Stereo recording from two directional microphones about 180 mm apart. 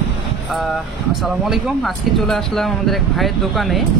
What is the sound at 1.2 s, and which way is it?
Speech, centre (ahead or behind).